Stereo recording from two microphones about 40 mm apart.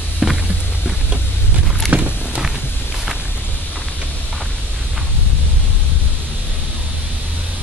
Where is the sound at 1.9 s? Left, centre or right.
Right.